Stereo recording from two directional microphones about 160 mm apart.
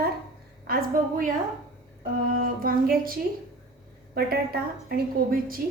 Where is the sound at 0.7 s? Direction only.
70° right (ahead or behind).